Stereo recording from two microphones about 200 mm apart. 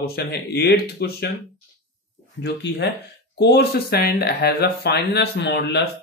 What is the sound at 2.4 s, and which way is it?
Speech, 60° left (ahead or behind).